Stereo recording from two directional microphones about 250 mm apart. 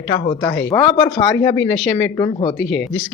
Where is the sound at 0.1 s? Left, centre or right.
Centre.